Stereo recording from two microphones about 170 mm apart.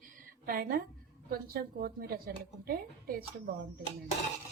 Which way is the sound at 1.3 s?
65° right (ahead or behind).